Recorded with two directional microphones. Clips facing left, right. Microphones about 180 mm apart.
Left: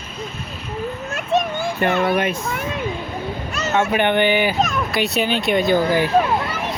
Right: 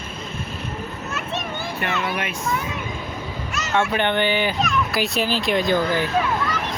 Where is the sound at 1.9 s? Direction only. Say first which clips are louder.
Left 7 dB; 55° left (ahead or behind).